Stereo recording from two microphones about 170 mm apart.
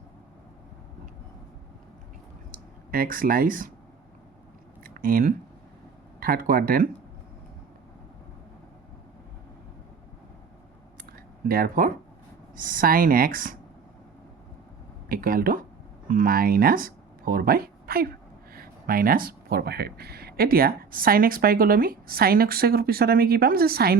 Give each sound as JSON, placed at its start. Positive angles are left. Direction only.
{"t": 2.5, "sound": "speech", "side_deg": -55}
{"t": 4.8, "sound": "a sound", "side_deg": -55}
{"t": 6.1, "sound": "speech", "side_deg": -55}
{"t": 11.4, "sound": "speech", "side_deg": -60}
{"t": 15.1, "sound": "speech", "side_deg": -60}